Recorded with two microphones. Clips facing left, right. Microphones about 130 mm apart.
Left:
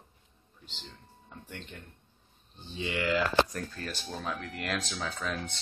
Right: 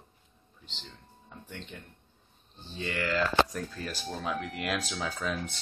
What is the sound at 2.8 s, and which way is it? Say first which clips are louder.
Speech: left 1 dB; 15° left (ahead or behind).